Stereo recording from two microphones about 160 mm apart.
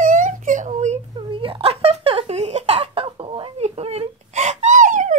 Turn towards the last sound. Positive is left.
turn(degrees=-50)  # may be behind; listen again after turning